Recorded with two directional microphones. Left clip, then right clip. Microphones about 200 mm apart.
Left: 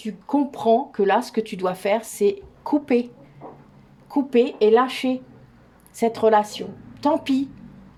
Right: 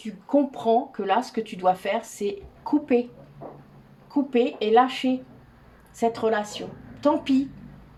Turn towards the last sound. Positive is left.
turn(degrees=45)  # may be behind; listen again after turning